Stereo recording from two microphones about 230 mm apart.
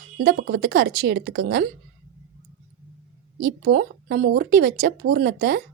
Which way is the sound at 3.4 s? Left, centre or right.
Right.